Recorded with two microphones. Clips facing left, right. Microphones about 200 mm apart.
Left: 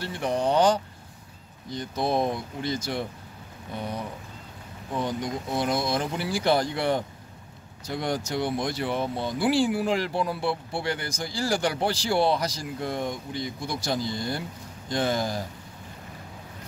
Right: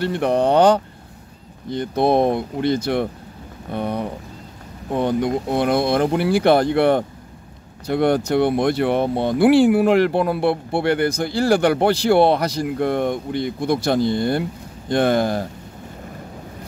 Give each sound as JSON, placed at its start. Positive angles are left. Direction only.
{"t": 0.0, "sound": "speech", "side_deg": -60}